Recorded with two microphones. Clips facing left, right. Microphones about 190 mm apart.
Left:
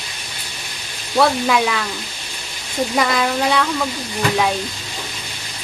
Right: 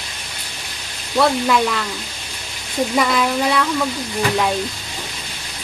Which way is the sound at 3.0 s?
Centre (ahead or behind).